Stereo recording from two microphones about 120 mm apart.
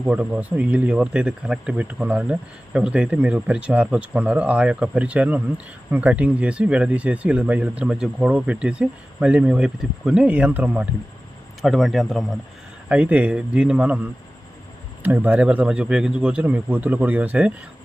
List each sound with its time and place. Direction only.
0.0 s speech: 10° right (ahead or behind)
11.6 s speech: centre (ahead or behind)
12.9 s speech: 10° right (ahead or behind)
15.0 s speech: 15° right (ahead or behind)